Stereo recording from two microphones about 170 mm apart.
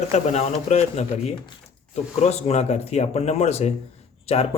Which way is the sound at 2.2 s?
40° left (ahead or behind).